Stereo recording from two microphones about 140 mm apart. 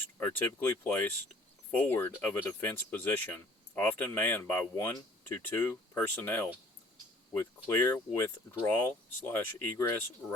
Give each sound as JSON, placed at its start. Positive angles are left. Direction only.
{"t": 0.4, "sound": "speech", "side_deg": 15}